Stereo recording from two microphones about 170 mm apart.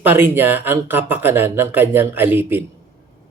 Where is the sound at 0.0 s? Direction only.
10° right (ahead or behind).